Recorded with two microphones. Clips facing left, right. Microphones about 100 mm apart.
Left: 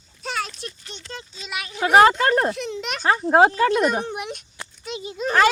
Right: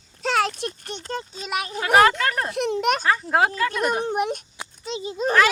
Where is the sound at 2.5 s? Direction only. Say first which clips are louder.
Right 7 dB; 55° right (ahead or behind).